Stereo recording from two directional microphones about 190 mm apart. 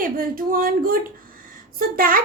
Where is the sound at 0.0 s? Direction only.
50° right (ahead or behind).